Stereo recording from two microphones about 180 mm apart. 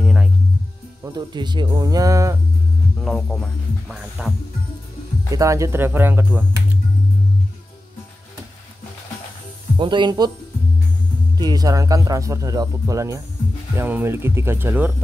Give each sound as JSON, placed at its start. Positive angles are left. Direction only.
{"t": 0.0, "sound": "music", "side_deg": -5}
{"t": 1.0, "sound": "speech", "side_deg": -25}
{"t": 3.0, "sound": "speech", "side_deg": 5}
{"t": 5.3, "sound": "speech", "side_deg": -15}
{"t": 9.8, "sound": "speech", "side_deg": -25}
{"t": 11.3, "sound": "speech", "side_deg": -20}